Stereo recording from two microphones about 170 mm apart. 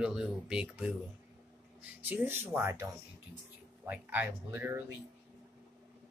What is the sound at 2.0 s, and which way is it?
Speech, 10° right (ahead or behind).